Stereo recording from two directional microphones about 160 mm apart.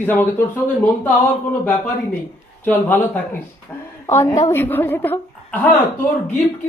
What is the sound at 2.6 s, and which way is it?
A woman's voice, 10° left (ahead or behind).